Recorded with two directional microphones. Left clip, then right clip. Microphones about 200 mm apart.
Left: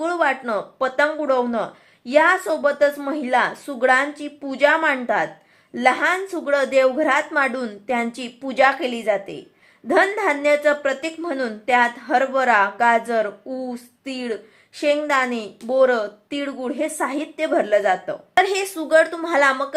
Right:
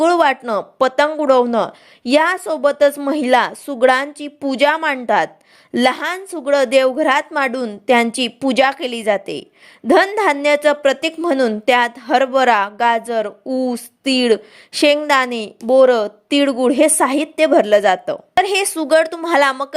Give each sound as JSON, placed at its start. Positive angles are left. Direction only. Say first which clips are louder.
{"t": 0.0, "sound": "speech", "louder": "right 7 dB", "side_deg": -40}